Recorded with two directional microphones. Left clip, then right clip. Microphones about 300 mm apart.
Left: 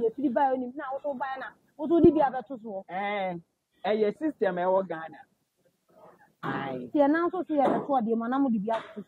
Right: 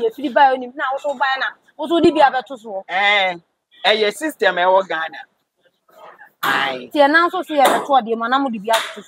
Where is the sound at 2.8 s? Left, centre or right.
Centre.